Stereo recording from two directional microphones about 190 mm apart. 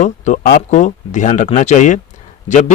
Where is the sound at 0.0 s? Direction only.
45° left (ahead or behind).